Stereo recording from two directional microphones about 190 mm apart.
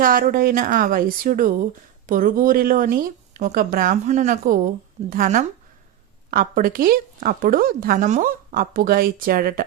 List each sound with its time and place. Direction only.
0.0 s speech: 50° right (ahead or behind)